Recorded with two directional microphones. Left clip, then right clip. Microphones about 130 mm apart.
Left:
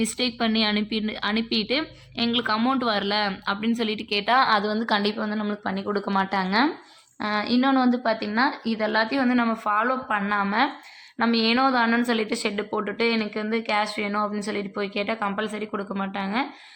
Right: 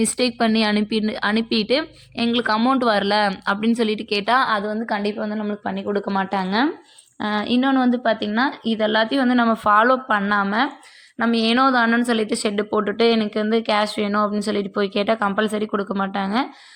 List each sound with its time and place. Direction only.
0.0 s speech: 60° right (ahead or behind); by 2.8 s 40° right (ahead or behind)
2.8 s a woman's voice: 55° right (ahead or behind)
4.5 s a woman's voice: 5° right (ahead or behind); by 9.6 s 45° right (ahead or behind)
9.6 s speech: 75° right (ahead or behind)
9.9 s a woman's voice: 50° right (ahead or behind)
10.4 s a woman's voice: 30° right (ahead or behind); by 14.1 s 50° right (ahead or behind)
14.1 s a woman's voice: 40° right (ahead or behind); by 16.5 s 55° right (ahead or behind)